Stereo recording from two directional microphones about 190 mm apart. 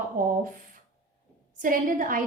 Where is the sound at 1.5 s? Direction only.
45° right (ahead or behind).